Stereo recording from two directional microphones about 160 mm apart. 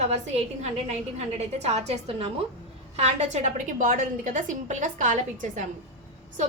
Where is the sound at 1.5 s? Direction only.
45° right (ahead or behind).